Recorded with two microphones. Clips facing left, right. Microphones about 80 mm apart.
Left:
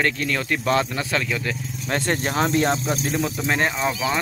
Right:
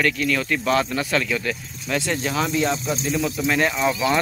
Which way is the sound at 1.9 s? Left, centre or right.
Left.